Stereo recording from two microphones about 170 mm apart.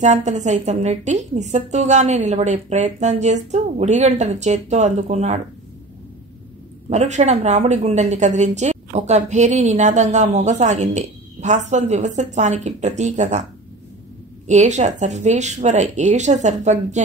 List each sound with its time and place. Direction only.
0.0 s a woman's voice: 45° right (ahead or behind)
6.9 s a woman's voice: 45° right (ahead or behind)
14.5 s a woman's voice: 45° right (ahead or behind)